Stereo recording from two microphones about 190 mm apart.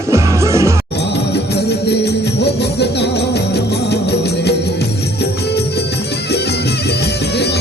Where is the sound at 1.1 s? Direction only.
60° left (ahead or behind).